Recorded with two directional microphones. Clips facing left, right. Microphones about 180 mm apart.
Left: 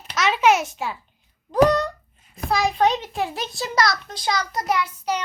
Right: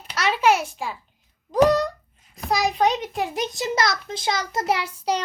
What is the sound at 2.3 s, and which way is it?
A child's voice, 15° right (ahead or behind).